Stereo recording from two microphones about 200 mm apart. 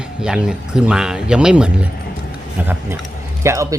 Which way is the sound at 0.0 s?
5° right (ahead or behind).